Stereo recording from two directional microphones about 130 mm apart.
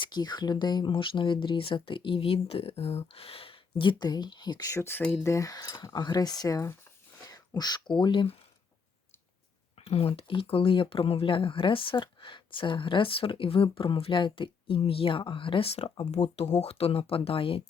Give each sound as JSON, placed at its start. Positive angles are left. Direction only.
{"t": 0.0, "sound": "speech", "side_deg": 35}
{"t": 9.7, "sound": "a sound", "side_deg": 50}
{"t": 10.2, "sound": "speech", "side_deg": 45}